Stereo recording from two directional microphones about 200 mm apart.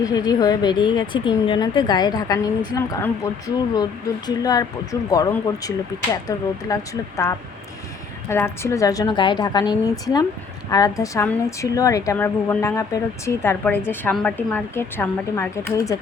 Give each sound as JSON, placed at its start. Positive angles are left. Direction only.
{"t": 0.0, "sound": "a woman's voice", "side_deg": 20}
{"t": 8.3, "sound": "a woman's voice", "side_deg": 10}